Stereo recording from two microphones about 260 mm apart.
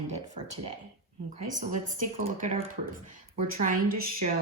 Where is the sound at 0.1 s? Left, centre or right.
Right.